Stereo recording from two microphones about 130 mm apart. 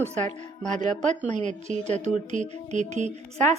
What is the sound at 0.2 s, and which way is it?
Speech, 5° left (ahead or behind).